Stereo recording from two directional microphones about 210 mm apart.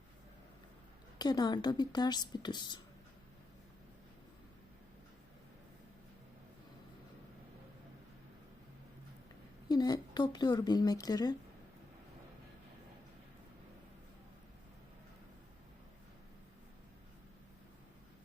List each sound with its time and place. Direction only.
1.2 s speech: 20° left (ahead or behind)
9.6 s speech: 20° left (ahead or behind)